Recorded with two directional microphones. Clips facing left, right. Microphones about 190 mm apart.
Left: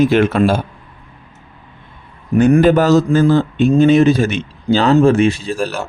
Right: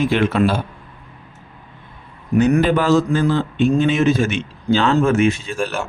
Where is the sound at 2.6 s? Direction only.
45° left (ahead or behind).